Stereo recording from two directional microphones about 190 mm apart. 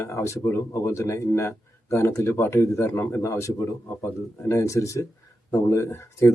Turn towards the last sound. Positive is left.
turn(degrees=15)  # may be behind; listen again after turning